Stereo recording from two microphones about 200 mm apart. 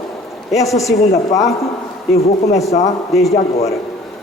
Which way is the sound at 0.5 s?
15° left (ahead or behind).